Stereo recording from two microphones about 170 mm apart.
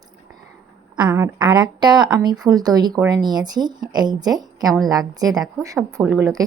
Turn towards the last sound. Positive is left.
turn(degrees=-15)  # may be behind; listen again after turning